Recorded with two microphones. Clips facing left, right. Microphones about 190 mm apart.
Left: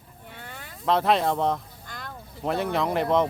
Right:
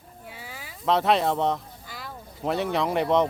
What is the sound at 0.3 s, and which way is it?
Speech, 5° right (ahead or behind).